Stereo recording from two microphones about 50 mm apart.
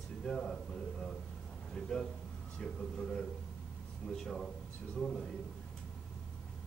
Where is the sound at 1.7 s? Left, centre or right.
Centre.